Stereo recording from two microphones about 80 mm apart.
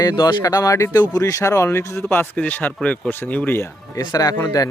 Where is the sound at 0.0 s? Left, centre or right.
Left.